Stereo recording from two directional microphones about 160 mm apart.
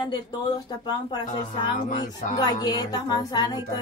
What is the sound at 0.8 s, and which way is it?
Music, 25° left (ahead or behind).